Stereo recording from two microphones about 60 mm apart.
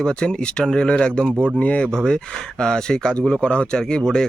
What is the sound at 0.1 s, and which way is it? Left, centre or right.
Speech, centre.